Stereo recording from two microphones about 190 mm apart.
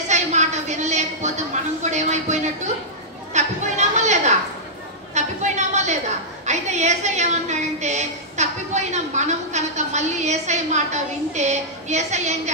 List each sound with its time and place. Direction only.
0.1 s a woman's voice: 40° right (ahead or behind)
3.3 s chatter: 35° right (ahead or behind)
5.1 s a sound: 40° right (ahead or behind)
8.9 s a woman's voice: 35° right (ahead or behind)